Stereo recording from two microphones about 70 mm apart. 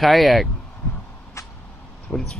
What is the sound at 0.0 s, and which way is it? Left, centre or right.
Speech, centre.